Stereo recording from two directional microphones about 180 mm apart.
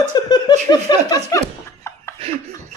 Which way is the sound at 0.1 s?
25° left (ahead or behind).